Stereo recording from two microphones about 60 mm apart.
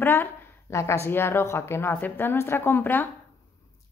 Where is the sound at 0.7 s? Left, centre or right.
Left.